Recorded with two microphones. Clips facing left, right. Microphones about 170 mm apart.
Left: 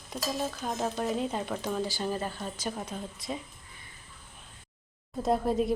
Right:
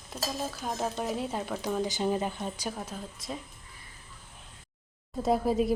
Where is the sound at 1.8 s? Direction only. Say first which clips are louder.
Right 3 dB; 20° right (ahead or behind).